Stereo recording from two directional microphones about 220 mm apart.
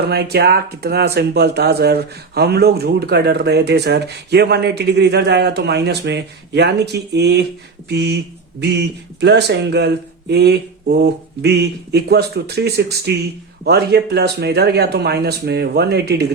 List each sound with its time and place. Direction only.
0.1 s speech: 45° right (ahead or behind)